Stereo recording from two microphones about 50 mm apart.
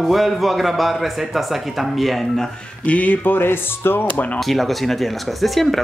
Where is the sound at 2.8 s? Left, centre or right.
Left.